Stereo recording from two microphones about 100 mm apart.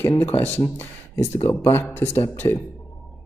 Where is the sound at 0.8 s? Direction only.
25° left (ahead or behind).